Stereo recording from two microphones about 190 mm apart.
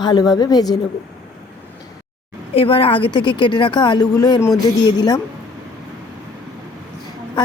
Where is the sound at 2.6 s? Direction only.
30° left (ahead or behind).